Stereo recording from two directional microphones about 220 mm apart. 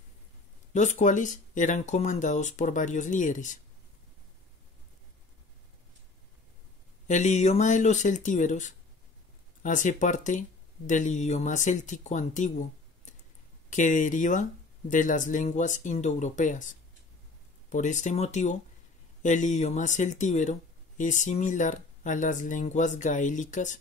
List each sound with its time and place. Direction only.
0.7 s speech: 35° left (ahead or behind)
7.1 s speech: 35° left (ahead or behind)